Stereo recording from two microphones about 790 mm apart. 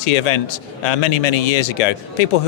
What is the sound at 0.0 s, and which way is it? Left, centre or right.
Speech, left.